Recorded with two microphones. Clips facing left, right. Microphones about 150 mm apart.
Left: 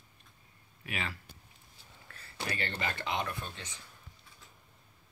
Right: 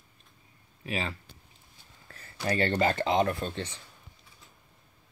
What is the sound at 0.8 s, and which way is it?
Speech, 25° right (ahead or behind).